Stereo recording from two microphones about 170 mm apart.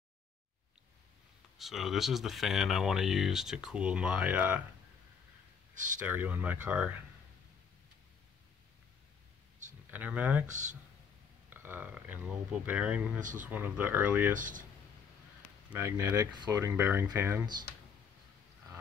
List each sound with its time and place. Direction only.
1.6 s speech: centre (ahead or behind)
5.9 s speech: 10° right (ahead or behind)
9.8 s speech: 10° right (ahead or behind)
11.5 s speech: 10° right (ahead or behind)
13.2 s speech: 50° right (ahead or behind)
13.5 s speech: 10° right (ahead or behind)
14.3 s speech: 50° right (ahead or behind)
15.7 s speech: 15° right (ahead or behind)